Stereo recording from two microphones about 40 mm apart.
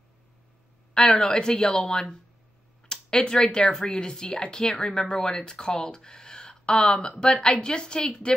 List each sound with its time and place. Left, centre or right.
0.9 s speech: centre
2.9 s a sound: centre
3.5 s speech: centre